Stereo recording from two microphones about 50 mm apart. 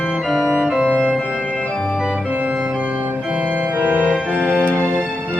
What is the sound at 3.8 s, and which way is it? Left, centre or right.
Music, right.